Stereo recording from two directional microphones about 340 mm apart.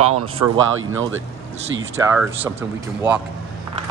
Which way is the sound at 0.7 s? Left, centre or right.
Right.